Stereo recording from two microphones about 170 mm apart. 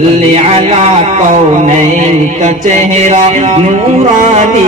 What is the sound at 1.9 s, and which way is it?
Music, 45° right (ahead or behind).